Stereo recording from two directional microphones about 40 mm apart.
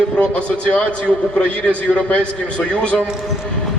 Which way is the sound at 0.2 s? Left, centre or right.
Left.